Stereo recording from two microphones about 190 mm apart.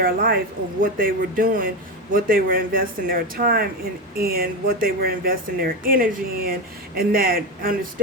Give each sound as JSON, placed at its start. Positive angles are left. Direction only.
{"t": 0.0, "sound": "speech", "side_deg": -50}